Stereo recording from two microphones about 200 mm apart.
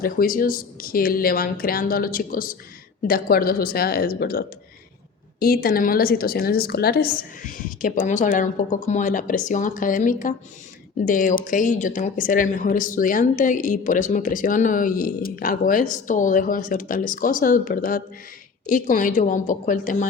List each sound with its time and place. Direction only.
0.0 s a woman's voice: 45° left (ahead or behind)